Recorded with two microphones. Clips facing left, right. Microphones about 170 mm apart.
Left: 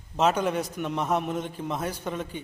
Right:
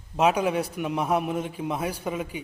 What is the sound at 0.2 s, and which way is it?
A man's voice, 10° right (ahead or behind).